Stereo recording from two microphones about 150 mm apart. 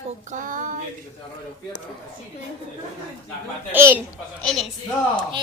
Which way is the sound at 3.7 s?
15° right (ahead or behind).